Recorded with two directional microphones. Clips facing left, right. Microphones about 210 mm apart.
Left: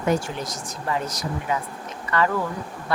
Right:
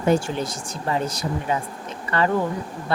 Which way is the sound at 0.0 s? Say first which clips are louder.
Right 3 dB; 30° right (ahead or behind).